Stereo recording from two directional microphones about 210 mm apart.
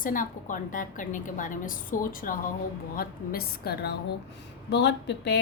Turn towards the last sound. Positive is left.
turn(degrees=55)  # may be behind; listen again after turning